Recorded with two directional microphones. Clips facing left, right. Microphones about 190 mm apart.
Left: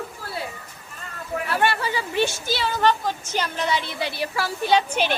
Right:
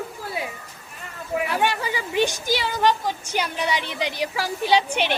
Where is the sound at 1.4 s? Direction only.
15° right (ahead or behind).